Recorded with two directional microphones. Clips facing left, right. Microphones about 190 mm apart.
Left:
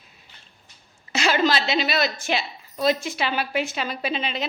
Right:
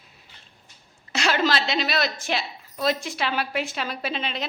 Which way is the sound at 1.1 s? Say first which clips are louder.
Left 2 dB; centre (ahead or behind).